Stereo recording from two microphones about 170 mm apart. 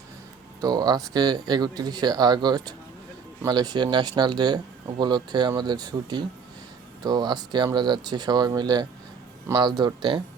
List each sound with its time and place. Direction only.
0.6 s speech: 25° right (ahead or behind)